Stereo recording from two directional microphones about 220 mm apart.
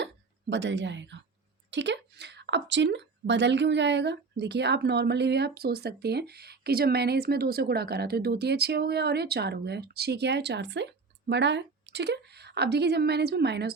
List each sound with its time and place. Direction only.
0.5 s speech: 55° right (ahead or behind)